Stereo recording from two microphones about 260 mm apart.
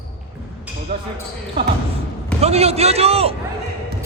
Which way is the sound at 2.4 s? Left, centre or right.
Right.